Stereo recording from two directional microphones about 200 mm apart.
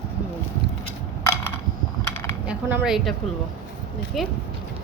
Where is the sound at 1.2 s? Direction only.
15° left (ahead or behind).